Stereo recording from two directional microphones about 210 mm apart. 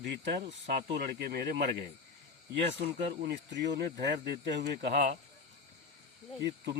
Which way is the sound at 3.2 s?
55° right (ahead or behind).